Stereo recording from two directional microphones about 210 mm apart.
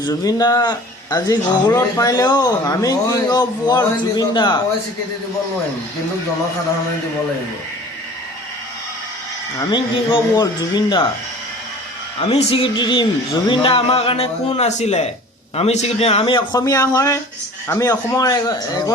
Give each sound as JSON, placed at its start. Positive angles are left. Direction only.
{"t": 0.0, "sound": "speech", "side_deg": 15}
{"t": 9.6, "sound": "speech", "side_deg": 20}
{"t": 12.2, "sound": "a man's voice", "side_deg": 30}